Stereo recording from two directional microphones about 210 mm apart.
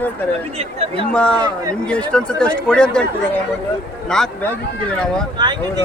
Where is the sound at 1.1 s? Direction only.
5° left (ahead or behind).